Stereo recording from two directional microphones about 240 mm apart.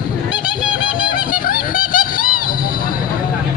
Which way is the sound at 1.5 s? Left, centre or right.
Left.